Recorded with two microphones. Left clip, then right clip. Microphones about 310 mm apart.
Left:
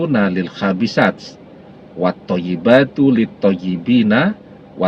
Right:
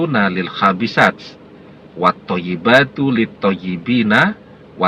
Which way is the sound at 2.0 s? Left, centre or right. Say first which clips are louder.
Right 3 dB; right.